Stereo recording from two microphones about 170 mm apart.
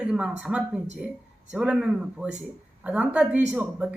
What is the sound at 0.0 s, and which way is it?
A woman's voice, 5° right (ahead or behind).